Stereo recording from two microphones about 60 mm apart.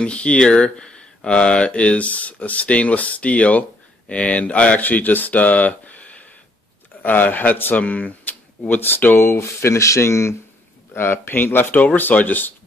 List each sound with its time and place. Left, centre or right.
0.0 s speech: centre
8.6 s speech: left
10.9 s speech: left